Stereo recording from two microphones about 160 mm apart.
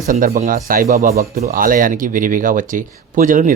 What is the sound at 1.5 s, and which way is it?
Speech, 60° right (ahead or behind).